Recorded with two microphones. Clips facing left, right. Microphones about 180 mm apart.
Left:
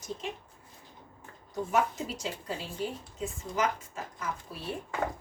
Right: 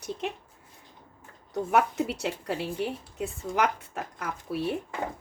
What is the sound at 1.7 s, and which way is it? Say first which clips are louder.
A woman's voice: right 4 dB; 65° right (ahead or behind).